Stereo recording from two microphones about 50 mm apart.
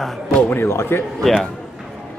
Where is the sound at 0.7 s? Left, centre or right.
Left.